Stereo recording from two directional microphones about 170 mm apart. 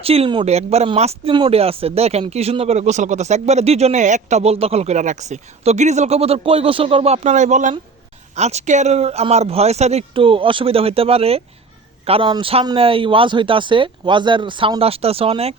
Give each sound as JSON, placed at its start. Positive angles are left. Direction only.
{"t": 0.0, "sound": "speech", "side_deg": -35}